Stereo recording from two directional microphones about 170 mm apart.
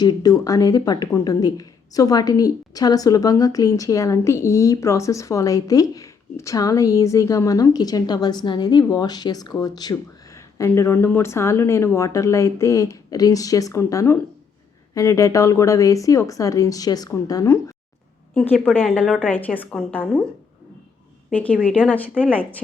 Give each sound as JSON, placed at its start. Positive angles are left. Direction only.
{"t": 0.0, "sound": "a woman's voice", "side_deg": 25}
{"t": 18.3, "sound": "a woman's voice", "side_deg": 5}
{"t": 21.2, "sound": "a woman's voice", "side_deg": 10}